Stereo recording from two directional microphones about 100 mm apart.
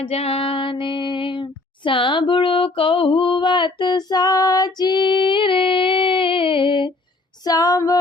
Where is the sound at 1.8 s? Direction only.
55° left (ahead or behind).